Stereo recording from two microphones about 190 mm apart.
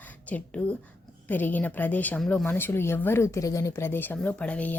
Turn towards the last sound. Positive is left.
turn(degrees=5)  # may be behind; listen again after turning